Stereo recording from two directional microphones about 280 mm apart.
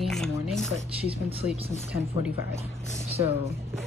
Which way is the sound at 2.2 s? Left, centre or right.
Centre.